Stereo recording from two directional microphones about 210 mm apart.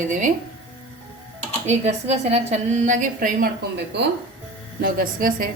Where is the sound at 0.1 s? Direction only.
35° right (ahead or behind).